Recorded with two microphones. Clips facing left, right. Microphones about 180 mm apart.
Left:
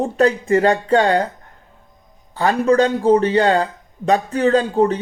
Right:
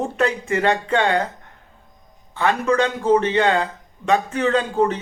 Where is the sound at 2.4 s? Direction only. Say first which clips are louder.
Left 4 dB; 35° left (ahead or behind).